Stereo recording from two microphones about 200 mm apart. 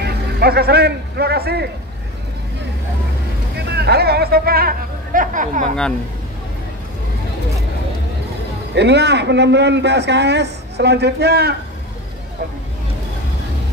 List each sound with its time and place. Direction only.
0.0 s speech: 50° right (ahead or behind)
3.5 s speech: 55° right (ahead or behind); by 5.7 s 40° right (ahead or behind)
8.7 s a man's voice: 60° right (ahead or behind)